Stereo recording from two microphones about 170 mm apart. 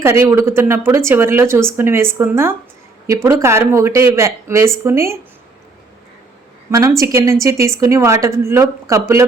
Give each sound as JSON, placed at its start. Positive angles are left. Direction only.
{"t": 0.3, "sound": "speech", "side_deg": -15}
{"t": 6.7, "sound": "speech", "side_deg": -20}